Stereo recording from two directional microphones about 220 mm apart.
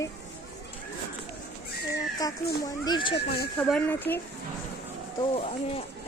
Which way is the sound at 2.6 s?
20° left (ahead or behind).